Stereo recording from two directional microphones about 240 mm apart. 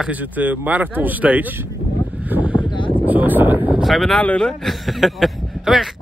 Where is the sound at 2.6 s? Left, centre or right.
Centre.